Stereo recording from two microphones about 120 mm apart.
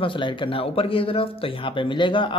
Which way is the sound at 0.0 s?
45° left (ahead or behind).